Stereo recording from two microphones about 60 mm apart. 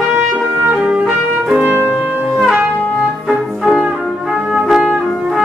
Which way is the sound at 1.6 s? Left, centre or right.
Right.